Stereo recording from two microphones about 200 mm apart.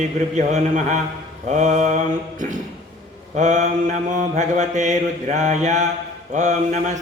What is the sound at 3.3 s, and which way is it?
Mantra, 35° right (ahead or behind).